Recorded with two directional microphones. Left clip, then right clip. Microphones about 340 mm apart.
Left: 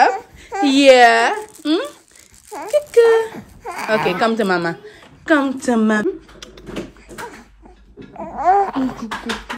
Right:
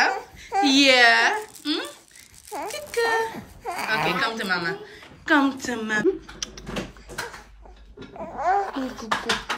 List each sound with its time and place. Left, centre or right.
0.0 s a sound: centre
2.5 s speech: centre
8.4 s babbling: centre